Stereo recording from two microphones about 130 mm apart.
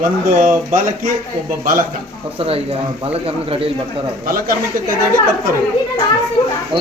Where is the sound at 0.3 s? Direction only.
80° right.